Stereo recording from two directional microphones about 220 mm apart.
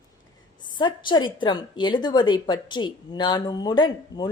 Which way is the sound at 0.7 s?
20° left (ahead or behind).